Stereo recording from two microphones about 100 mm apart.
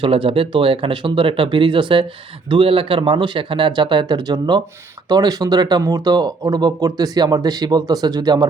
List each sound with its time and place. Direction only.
0.0 s speech: 65° right (ahead or behind); by 8.4 s 40° right (ahead or behind)